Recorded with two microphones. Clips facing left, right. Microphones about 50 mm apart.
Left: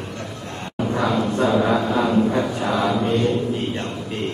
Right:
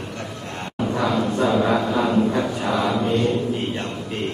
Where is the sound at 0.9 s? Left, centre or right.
Centre.